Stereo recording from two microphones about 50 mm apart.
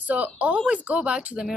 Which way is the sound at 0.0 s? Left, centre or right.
Right.